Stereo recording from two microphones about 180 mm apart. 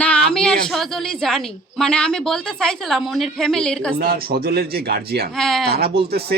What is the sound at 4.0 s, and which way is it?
Speech, 60° right (ahead or behind).